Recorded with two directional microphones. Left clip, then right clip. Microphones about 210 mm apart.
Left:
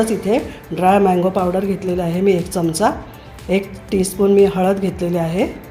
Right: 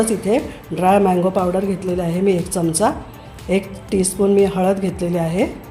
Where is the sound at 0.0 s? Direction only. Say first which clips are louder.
Left 1 dB; centre (ahead or behind).